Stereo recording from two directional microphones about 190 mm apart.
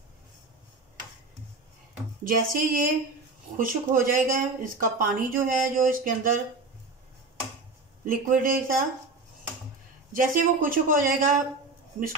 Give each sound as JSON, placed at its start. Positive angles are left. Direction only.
{"t": 2.2, "sound": "speech", "side_deg": -45}
{"t": 8.0, "sound": "speech", "side_deg": -45}
{"t": 10.1, "sound": "speech", "side_deg": -45}